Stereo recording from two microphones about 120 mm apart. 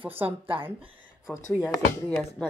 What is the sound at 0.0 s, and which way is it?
Speech, 15° right (ahead or behind).